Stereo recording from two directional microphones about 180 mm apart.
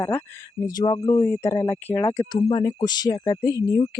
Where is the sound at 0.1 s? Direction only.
10° left (ahead or behind).